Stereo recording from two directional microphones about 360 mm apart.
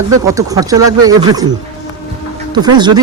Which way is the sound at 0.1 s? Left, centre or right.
Centre.